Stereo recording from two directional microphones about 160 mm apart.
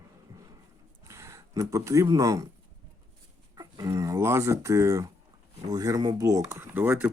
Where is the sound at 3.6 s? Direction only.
25° right (ahead or behind).